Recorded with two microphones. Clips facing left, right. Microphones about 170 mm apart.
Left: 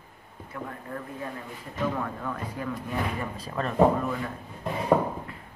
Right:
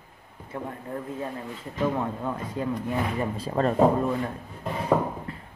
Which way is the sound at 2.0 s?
25° right (ahead or behind).